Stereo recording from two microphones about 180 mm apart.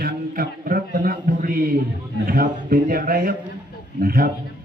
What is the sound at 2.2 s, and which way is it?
Speech, 55° right (ahead or behind).